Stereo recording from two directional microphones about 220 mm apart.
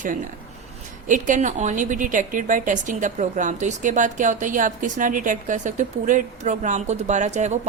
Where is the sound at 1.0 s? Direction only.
35° right (ahead or behind).